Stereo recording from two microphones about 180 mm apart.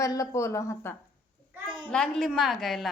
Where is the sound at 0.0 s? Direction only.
20° left (ahead or behind).